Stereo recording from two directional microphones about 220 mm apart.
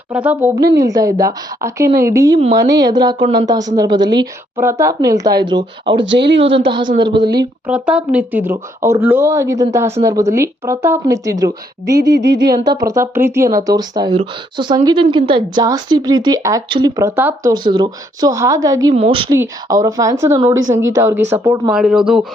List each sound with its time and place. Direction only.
0.1 s a woman's voice: 5° right (ahead or behind)
5.9 s speech: 55° right (ahead or behind)
6.4 s a woman's voice: 25° right (ahead or behind)
7.7 s speech: 5° right (ahead or behind)
12.0 s speech: 50° right (ahead or behind)
12.9 s a woman's voice: 10° right (ahead or behind)